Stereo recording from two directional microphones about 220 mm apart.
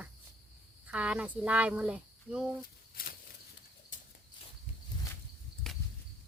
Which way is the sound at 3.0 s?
40° left (ahead or behind).